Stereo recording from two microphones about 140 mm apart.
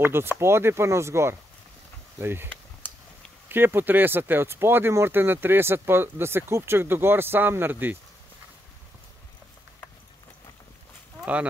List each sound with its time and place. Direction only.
0.0 s speech: 15° right (ahead or behind)